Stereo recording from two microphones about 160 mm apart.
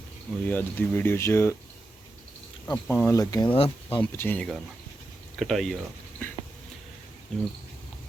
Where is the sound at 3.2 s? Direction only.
20° left (ahead or behind).